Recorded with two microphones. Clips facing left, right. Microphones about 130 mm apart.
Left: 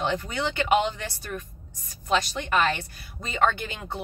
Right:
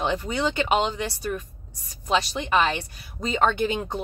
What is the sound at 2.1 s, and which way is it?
A woman's voice, 20° right (ahead or behind).